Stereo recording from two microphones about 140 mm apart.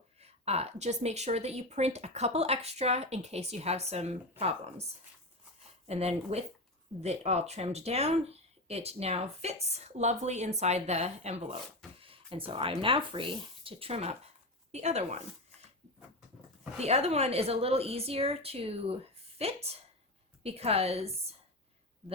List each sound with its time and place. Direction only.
0.2 s speech: 45° right (ahead or behind)
5.9 s speech: 50° right (ahead or behind)
16.7 s speech: 50° right (ahead or behind)